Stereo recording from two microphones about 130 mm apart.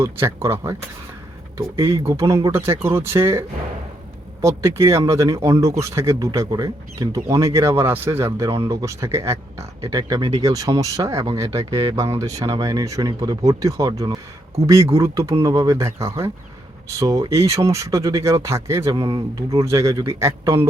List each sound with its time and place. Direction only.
0.0 s speech: 20° right (ahead or behind)
12.2 s speech: 25° right (ahead or behind)